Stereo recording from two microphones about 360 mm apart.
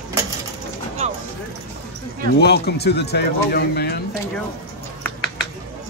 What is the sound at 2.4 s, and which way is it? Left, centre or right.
Speech, left.